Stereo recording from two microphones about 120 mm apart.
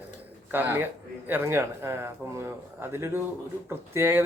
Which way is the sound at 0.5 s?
15° right (ahead or behind).